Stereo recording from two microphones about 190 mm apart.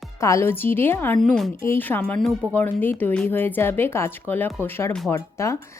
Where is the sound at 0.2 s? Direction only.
15° left (ahead or behind).